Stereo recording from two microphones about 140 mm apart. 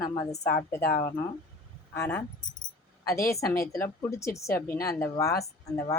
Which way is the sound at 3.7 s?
20° left (ahead or behind).